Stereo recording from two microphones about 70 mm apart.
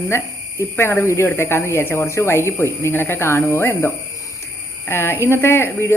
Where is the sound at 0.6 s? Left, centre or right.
Left.